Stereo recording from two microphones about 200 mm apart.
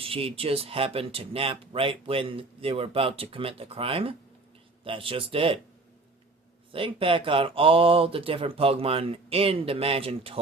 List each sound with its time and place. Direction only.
0.0 s speech: 30° right (ahead or behind)
6.7 s speech: 25° right (ahead or behind)